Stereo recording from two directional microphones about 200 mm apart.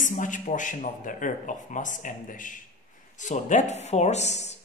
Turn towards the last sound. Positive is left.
turn(degrees=35)  # may be behind; listen again after turning